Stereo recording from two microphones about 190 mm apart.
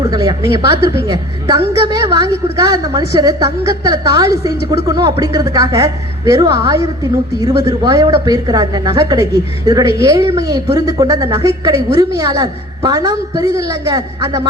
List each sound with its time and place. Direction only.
0.0 s a woman's voice: 20° right (ahead or behind)